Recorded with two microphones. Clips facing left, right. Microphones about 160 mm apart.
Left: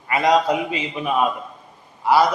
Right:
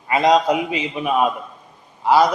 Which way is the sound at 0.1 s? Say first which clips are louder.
Right 2 dB; 20° right (ahead or behind).